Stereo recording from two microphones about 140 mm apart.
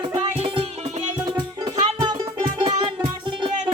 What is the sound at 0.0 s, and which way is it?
Music, 40° right (ahead or behind).